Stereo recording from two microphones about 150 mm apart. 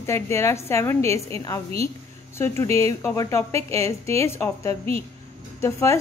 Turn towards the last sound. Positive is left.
turn(degrees=20)  # may be behind; listen again after turning